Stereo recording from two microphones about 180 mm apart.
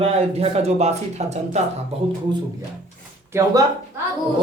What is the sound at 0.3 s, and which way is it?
Speech, 35° right (ahead or behind).